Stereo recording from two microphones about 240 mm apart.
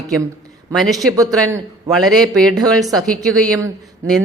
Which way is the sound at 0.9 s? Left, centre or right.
Centre.